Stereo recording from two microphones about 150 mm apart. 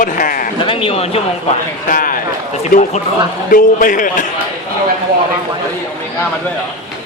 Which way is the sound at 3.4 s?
65° left (ahead or behind).